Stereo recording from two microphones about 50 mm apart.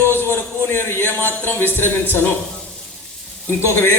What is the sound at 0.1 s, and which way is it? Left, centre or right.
A man's voice, left.